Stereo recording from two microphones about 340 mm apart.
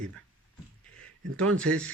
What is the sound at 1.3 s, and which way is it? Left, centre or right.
Speech, right.